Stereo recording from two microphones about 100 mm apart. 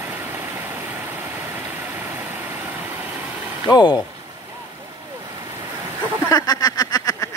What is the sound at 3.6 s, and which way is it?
Speech, 45° left (ahead or behind).